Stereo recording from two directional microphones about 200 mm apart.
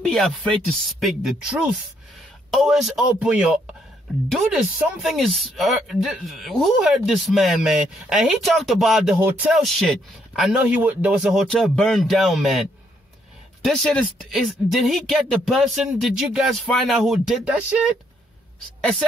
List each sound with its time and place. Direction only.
0.0 s speech: 5° left (ahead or behind)
13.7 s speech: centre (ahead or behind)